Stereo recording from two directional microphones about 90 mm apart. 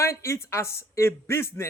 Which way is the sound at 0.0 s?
30° left (ahead or behind).